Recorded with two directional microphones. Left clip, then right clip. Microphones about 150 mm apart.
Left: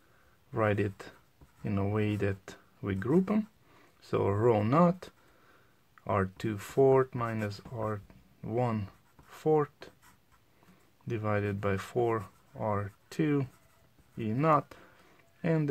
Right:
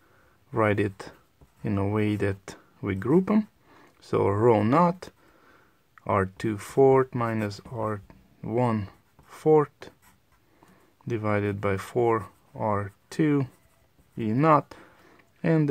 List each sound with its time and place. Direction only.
0.5 s speech: 30° right (ahead or behind)
11.1 s speech: 25° right (ahead or behind)
14.1 s a sound: 25° right (ahead or behind)